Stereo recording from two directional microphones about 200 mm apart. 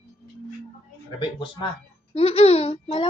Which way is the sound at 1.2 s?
25° left (ahead or behind).